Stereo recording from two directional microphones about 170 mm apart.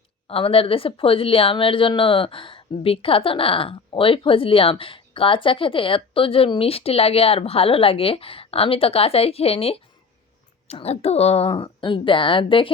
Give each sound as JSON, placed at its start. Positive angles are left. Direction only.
{"t": 0.3, "sound": "speech", "side_deg": 35}